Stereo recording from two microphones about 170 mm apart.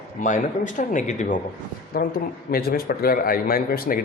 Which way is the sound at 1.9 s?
60° left (ahead or behind).